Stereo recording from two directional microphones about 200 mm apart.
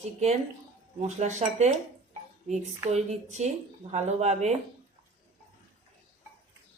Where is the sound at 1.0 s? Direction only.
35° right (ahead or behind).